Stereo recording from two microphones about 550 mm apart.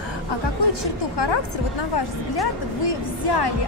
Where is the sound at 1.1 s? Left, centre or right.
Left.